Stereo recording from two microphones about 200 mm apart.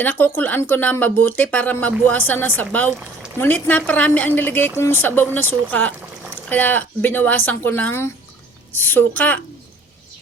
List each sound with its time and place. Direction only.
0.0 s speech: 10° left (ahead or behind)